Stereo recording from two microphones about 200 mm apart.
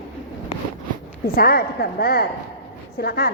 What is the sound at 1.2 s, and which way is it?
A woman's voice, 50° left (ahead or behind).